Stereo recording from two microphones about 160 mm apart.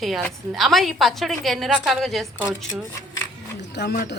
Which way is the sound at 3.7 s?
90° left.